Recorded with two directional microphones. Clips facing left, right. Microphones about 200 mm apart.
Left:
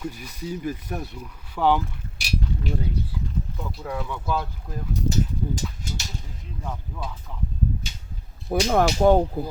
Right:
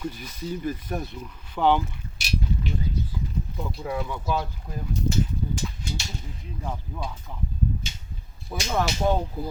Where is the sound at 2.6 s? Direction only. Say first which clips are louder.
Left 2 dB; 60° left (ahead or behind).